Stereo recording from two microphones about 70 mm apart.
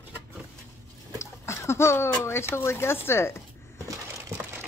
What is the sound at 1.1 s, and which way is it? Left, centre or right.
Speech, left.